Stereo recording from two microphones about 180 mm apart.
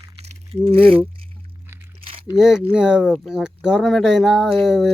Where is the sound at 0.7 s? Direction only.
30° right (ahead or behind).